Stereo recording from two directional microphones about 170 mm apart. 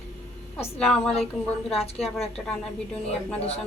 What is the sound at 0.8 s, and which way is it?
Speech, 5° left (ahead or behind).